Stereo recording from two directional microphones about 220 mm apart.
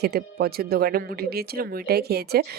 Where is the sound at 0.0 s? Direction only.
45° right (ahead or behind).